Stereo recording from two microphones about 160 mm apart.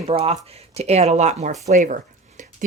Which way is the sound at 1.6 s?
50° right (ahead or behind).